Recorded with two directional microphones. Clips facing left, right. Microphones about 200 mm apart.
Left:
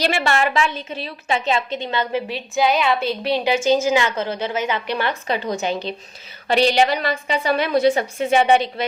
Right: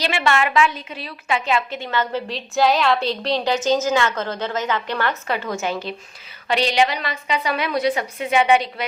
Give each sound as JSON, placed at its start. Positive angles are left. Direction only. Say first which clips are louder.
{"t": 0.2, "sound": "a woman's voice", "louder": "right 1 dB", "side_deg": 35}
{"t": 6.7, "sound": "a woman's voice", "louder": "left 2 dB", "side_deg": 35}